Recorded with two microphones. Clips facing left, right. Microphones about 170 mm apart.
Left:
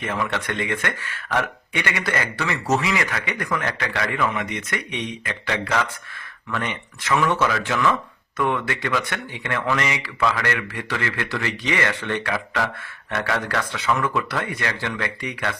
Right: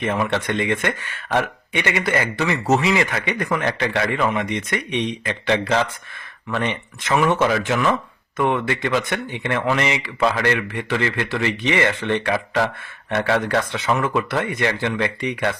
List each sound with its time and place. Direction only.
0.0 s speech: 25° right (ahead or behind)